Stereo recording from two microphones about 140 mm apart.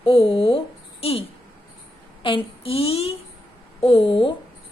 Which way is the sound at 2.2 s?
40° left (ahead or behind).